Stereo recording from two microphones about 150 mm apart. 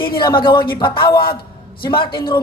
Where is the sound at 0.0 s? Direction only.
30° left (ahead or behind).